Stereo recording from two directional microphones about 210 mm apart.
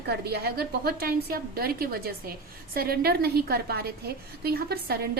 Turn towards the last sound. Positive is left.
turn(degrees=-45)  # may be behind; listen again after turning